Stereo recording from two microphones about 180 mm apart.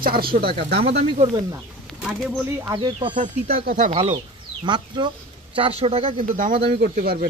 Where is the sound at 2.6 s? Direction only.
25° right (ahead or behind).